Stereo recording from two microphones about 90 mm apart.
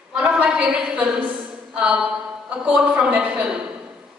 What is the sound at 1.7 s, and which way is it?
A woman's voice, 5° right (ahead or behind).